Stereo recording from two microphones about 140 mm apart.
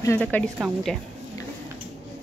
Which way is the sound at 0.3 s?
10° left (ahead or behind).